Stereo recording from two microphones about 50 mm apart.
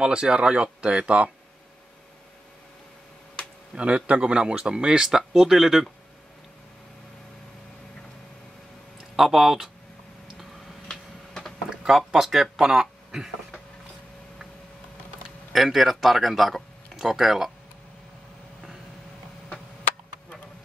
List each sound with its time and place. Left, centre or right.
0.0 s speech: centre
3.7 s speech: right
9.1 s speech: centre
10.9 s a sound: centre
11.7 s a sound: centre
12.1 s speech: centre
15.5 s speech: centre